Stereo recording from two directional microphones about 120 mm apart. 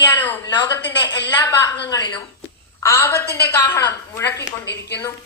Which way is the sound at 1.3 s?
20° left (ahead or behind).